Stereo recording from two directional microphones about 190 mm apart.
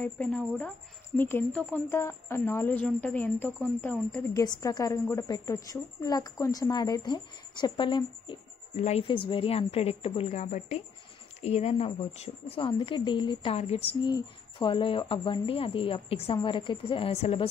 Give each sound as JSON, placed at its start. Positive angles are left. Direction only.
{"t": 0.0, "sound": "a woman's voice", "side_deg": 5}
{"t": 8.7, "sound": "a woman's voice", "side_deg": 35}